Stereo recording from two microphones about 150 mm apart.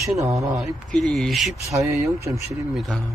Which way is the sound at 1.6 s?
20° right (ahead or behind).